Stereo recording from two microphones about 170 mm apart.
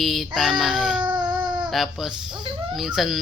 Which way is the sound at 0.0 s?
Centre (ahead or behind).